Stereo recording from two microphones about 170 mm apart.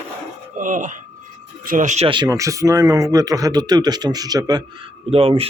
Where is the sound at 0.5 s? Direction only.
50° right (ahead or behind).